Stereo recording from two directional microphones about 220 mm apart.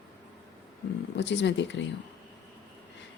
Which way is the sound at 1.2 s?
55° left (ahead or behind).